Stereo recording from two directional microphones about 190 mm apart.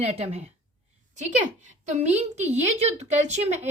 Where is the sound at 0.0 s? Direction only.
35° right (ahead or behind).